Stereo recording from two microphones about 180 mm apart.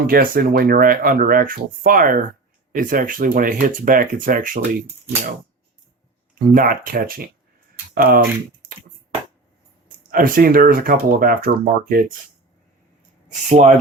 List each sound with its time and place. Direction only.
0.1 s speech: 55° right (ahead or behind)
6.5 s speech: 50° right (ahead or behind)
10.1 s speech: 50° right (ahead or behind)
13.2 s speech: 40° right (ahead or behind)